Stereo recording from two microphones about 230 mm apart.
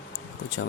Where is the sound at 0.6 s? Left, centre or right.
Left.